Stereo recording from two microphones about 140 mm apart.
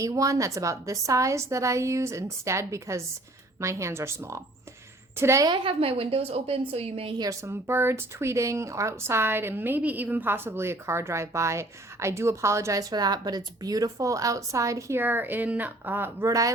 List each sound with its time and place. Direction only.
0.0 s speech: 25° right (ahead or behind)
5.5 s a woman's voice: 40° right (ahead or behind)
7.2 s speech: 20° right (ahead or behind)